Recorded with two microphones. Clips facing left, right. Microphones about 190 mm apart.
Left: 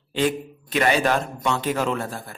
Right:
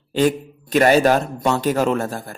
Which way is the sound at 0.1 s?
40° right (ahead or behind).